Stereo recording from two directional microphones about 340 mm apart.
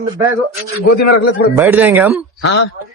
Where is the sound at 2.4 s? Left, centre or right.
Left.